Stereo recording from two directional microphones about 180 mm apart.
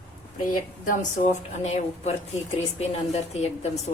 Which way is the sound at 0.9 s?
40° left (ahead or behind).